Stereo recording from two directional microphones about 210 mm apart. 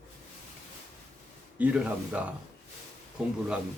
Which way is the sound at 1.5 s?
5° right (ahead or behind).